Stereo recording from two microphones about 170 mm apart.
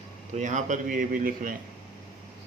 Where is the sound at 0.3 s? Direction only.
45° right (ahead or behind).